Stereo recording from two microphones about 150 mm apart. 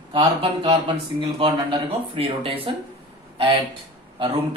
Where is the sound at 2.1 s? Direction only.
40° right (ahead or behind).